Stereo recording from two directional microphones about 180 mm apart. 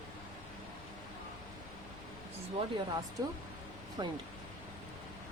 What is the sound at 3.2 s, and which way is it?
Speech, 20° right (ahead or behind).